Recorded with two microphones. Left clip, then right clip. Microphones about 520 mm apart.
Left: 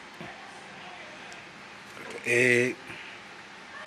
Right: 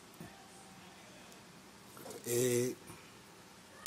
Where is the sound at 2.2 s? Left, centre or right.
Right.